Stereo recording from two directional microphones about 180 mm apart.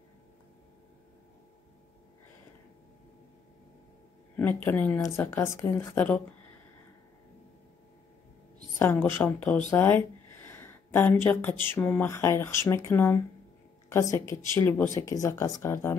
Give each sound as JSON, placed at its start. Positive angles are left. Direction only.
{"t": 4.4, "sound": "speech", "side_deg": 10}
{"t": 8.7, "sound": "speech", "side_deg": 10}
{"t": 9.7, "sound": "a sound", "side_deg": 10}
{"t": 11.6, "sound": "speech", "side_deg": 10}